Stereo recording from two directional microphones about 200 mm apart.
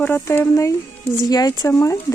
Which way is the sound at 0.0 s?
10° left (ahead or behind).